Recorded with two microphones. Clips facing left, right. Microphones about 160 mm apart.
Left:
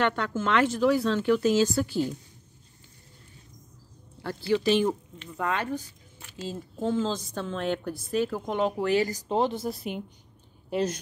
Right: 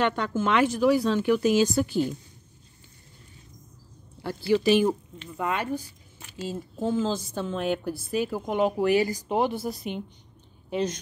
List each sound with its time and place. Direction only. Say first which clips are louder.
0.0 s speech: right 1 dB; 15° right (ahead or behind)
4.2 s speech: right 2 dB; 10° right (ahead or behind)
9.7 s a woman's voice: even; 5° left (ahead or behind)